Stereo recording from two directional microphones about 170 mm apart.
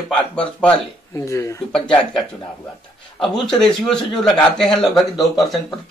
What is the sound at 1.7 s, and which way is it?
A man's voice, 5° left (ahead or behind).